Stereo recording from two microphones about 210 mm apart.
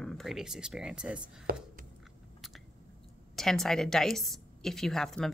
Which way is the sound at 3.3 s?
Centre (ahead or behind).